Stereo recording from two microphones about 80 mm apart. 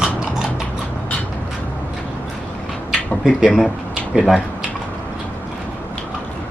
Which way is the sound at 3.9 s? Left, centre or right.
Centre.